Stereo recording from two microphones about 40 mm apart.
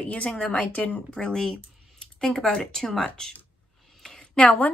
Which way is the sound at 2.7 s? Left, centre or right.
Centre.